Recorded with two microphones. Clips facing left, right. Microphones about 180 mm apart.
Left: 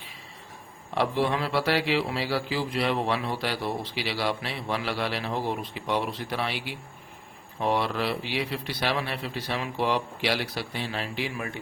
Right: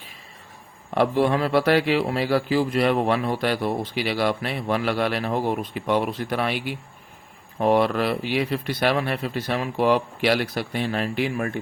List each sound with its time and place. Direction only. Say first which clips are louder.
0.9 s speech: right 5 dB; 50° right (ahead or behind)